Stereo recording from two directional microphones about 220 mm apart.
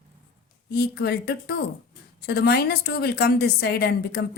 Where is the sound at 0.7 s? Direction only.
45° left (ahead or behind).